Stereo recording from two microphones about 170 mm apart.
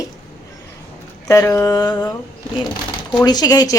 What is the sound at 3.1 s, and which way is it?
Speech, 25° left (ahead or behind).